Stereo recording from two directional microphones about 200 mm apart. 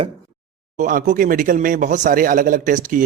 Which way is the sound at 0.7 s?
40° right (ahead or behind).